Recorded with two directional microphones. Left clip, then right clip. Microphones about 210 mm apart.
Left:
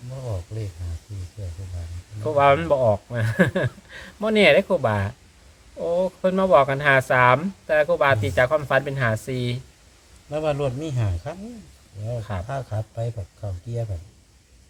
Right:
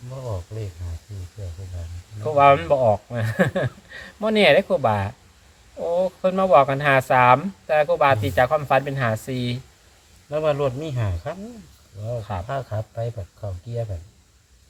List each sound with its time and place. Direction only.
2.3 s speech: 10° left (ahead or behind)
10.2 s speech: 30° right (ahead or behind)
12.5 s speech: 35° right (ahead or behind)